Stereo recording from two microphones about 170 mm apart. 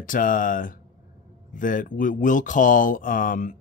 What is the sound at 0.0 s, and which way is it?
Speech, 55° left (ahead or behind).